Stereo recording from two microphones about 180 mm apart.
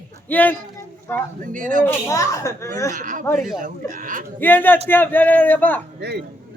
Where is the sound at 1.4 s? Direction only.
45° right (ahead or behind).